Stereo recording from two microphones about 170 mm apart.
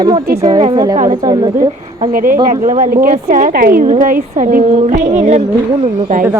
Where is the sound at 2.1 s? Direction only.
55° right (ahead or behind).